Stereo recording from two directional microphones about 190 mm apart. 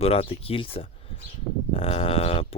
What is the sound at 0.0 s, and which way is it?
Speech, 30° left (ahead or behind).